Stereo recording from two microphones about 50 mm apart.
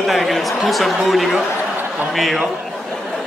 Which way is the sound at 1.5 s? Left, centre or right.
Right.